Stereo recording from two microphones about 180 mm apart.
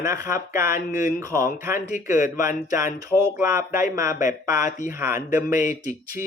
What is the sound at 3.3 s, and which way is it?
Speech, 15° right (ahead or behind).